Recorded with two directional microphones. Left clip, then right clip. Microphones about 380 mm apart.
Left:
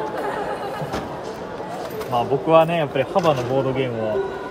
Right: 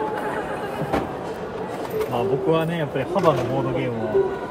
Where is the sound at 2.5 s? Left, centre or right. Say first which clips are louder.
Left 10 dB; centre.